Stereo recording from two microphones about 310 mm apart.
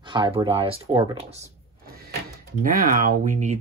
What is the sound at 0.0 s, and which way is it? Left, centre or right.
Speech, centre.